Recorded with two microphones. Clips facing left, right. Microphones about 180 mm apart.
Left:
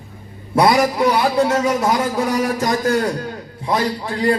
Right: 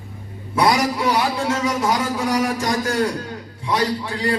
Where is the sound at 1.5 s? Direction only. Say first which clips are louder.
Left 4 dB; 50° left (ahead or behind).